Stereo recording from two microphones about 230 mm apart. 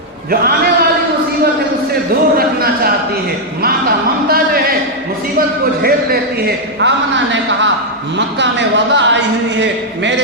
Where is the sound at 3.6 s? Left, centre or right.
Right.